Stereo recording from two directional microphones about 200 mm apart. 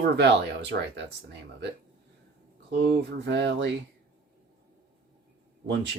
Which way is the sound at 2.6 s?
60° right (ahead or behind).